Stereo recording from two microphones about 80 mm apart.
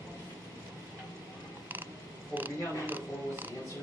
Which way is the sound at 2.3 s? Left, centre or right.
Right.